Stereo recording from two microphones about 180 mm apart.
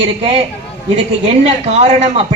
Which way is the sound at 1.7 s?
35° right (ahead or behind).